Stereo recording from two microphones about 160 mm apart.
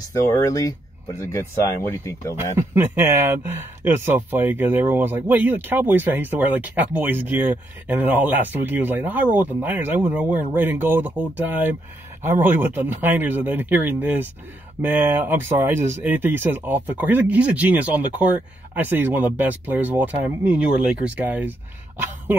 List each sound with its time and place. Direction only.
0.1 s speech: 15° left (ahead or behind)
2.3 s speech: 15° right (ahead or behind)